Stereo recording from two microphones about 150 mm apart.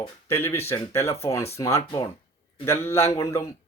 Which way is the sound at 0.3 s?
15° left (ahead or behind).